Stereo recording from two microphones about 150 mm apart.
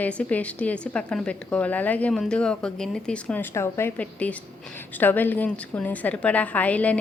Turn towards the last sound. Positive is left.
turn(degrees=10)  # may be behind; listen again after turning